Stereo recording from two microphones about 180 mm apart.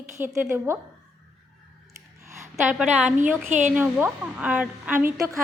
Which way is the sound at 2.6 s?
5° right (ahead or behind).